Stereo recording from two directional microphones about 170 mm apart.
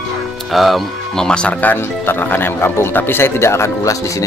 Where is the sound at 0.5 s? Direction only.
Centre (ahead or behind); by 3.9 s 15° left (ahead or behind).